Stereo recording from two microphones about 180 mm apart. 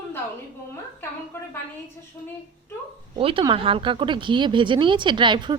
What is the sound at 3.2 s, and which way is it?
Speech, 30° right (ahead or behind).